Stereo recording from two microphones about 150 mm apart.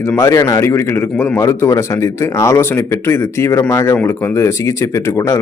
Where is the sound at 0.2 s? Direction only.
20° left (ahead or behind).